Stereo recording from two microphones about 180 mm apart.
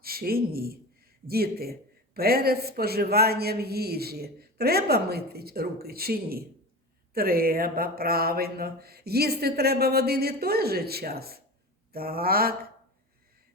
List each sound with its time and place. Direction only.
0.0 s a man's voice: 55° right (ahead or behind)